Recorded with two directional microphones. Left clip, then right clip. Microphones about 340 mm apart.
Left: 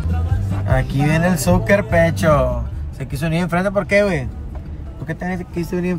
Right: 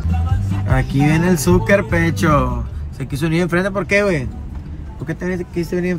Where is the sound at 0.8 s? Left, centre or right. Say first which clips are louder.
Right 2 dB; centre.